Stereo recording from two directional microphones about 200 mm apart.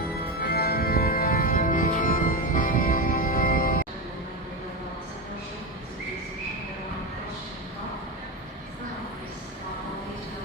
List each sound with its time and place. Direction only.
0.0 s music: 50° left (ahead or behind)